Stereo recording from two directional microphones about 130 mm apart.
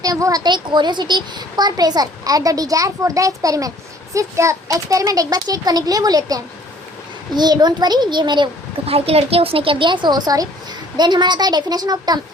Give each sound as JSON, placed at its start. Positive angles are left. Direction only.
{"t": 0.0, "sound": "a woman's voice", "side_deg": -25}
{"t": 8.9, "sound": "speech", "side_deg": -50}